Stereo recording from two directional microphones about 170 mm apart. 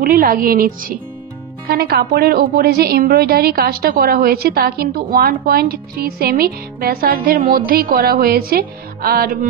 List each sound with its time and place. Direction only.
0.0 s a woman's voice: 60° right (ahead or behind)